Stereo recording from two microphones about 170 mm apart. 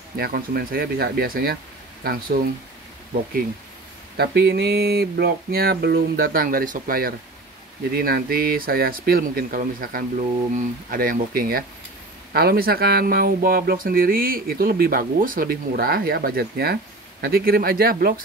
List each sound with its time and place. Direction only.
0.2 s speech: 60° right (ahead or behind)
4.2 s speech: 75° right (ahead or behind)